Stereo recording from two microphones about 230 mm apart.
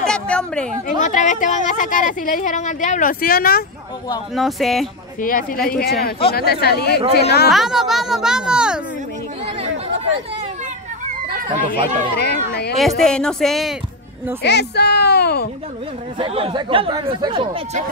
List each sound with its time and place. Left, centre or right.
0.0 s a sound: centre
1.0 s speech: left
4.4 s speech: centre
5.2 s speech: left
7.4 s speech: centre
11.4 s speech: right
12.2 s speech: left
12.7 s speech: centre
14.4 s a woman's voice: left
16.2 s speech: right